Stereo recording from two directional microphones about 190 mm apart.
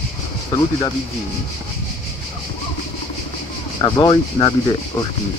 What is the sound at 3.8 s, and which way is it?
Speech, 25° left (ahead or behind).